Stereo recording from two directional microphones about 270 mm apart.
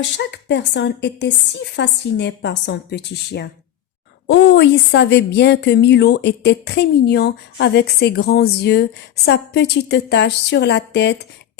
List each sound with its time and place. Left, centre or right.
0.2 s a woman's voice: left